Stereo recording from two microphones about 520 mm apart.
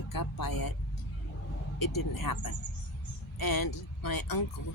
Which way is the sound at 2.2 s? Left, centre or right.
Left.